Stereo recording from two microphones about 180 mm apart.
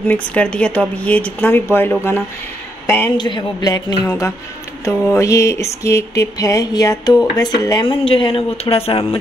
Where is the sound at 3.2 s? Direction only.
25° left (ahead or behind).